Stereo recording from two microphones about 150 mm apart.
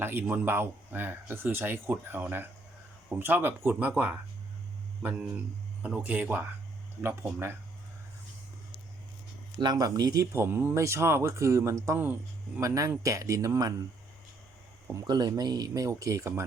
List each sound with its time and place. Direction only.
0.0 s speech: 15° right (ahead or behind)
5.8 s speech: 10° right (ahead or behind)
9.6 s speech: 25° right (ahead or behind)
15.0 s speech: 30° right (ahead or behind)